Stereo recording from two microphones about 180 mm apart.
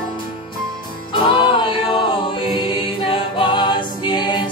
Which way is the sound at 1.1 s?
25° left (ahead or behind).